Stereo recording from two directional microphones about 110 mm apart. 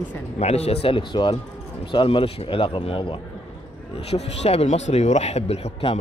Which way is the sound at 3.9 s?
70° left (ahead or behind).